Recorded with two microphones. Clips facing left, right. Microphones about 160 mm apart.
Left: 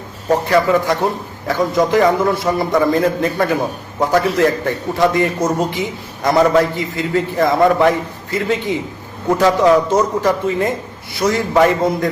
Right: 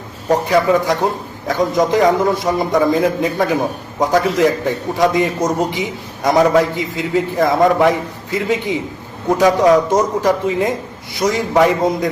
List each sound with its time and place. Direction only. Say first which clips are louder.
0.4 s a man's voice: even; 15° right (ahead or behind)